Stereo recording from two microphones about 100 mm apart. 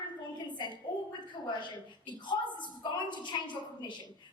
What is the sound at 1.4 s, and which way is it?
A woman's voice, 50° left (ahead or behind).